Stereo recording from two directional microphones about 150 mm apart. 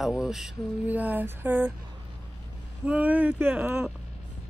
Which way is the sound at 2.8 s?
10° right (ahead or behind).